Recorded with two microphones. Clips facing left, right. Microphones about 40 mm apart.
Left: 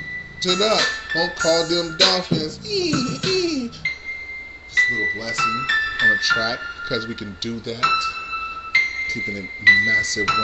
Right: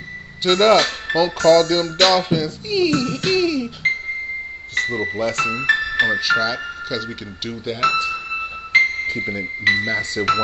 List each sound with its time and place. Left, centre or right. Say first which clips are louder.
0.4 s speech: right 5 dB; right
3.3 s music: right 3 dB; centre
4.7 s music: left 4 dB; right
5.1 s speech: right 1 dB; right
5.7 s speech: right 1 dB; centre
6.4 s speech: right 2 dB; centre
7.4 s speech: right 2 dB; centre
8.7 s music: right 4 dB; right
9.8 s speech: left 1 dB; right